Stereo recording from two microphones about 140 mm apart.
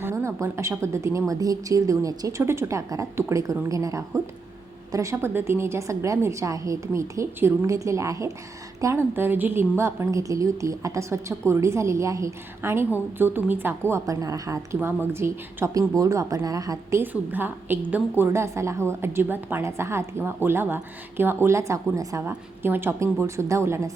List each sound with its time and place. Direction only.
0.0 s a woman's voice: 20° right (ahead or behind)
17.0 s a woman's voice: 15° right (ahead or behind)